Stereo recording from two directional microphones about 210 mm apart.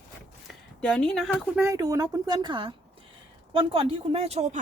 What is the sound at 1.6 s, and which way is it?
A woman's voice, 15° right (ahead or behind).